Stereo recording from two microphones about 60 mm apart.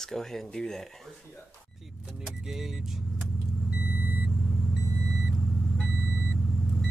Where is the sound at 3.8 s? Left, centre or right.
Right.